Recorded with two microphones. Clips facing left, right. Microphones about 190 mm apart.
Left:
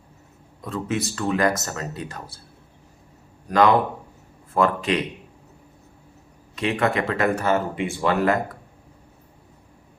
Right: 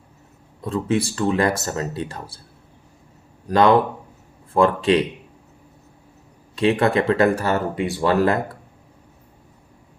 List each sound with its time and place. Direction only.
0.6 s speech: 30° right (ahead or behind)
4.5 s speech: 30° right (ahead or behind)
6.6 s speech: 35° right (ahead or behind)